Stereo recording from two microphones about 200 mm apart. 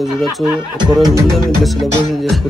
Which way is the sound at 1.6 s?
Centre (ahead or behind).